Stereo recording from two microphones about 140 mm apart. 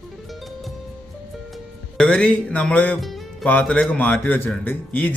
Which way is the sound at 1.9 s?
5° left (ahead or behind).